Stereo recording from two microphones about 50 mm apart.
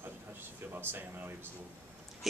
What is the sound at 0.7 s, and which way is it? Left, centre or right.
Speech, right.